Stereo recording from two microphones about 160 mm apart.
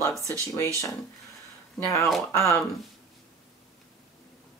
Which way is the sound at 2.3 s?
15° left (ahead or behind).